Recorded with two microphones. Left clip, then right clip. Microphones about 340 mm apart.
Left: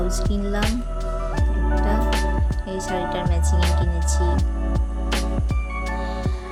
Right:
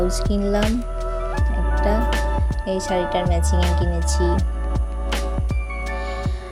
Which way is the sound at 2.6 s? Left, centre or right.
Centre.